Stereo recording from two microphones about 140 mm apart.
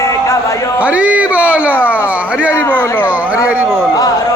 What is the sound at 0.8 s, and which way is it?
Speech, 10° right (ahead or behind).